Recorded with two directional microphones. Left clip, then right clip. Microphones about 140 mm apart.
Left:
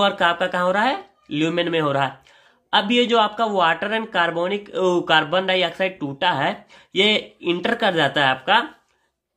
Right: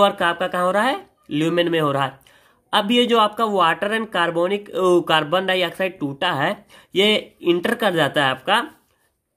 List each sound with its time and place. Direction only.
0.0 s speech: 35° right (ahead or behind)